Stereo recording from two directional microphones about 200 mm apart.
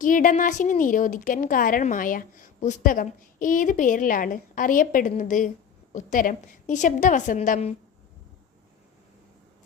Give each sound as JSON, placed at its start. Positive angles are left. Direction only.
{"t": 0.0, "sound": "a woman's voice", "side_deg": 40}